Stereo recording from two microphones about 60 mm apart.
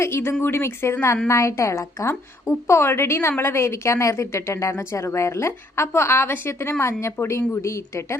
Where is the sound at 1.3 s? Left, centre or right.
Left.